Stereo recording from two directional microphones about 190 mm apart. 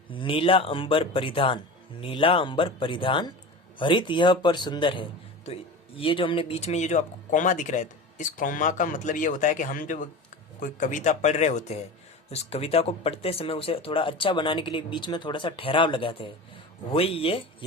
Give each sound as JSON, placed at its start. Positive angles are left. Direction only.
{"t": 0.1, "sound": "speech", "side_deg": 25}